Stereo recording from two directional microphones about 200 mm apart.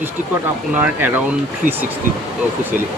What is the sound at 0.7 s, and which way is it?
Speech, 10° right (ahead or behind).